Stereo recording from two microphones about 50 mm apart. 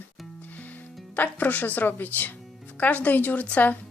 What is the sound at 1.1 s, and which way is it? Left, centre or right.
Speech, left.